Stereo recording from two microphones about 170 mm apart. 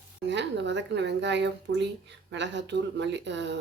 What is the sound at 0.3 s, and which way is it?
Speech, 90° right.